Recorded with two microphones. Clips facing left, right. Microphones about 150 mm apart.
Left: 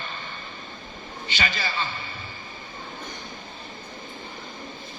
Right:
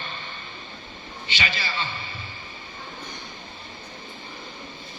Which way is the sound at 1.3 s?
45° left (ahead or behind).